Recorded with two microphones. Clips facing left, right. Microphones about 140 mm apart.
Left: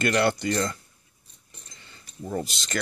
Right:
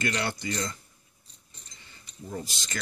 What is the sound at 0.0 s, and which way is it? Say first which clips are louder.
Speech: left 8 dB; 60° left (ahead or behind).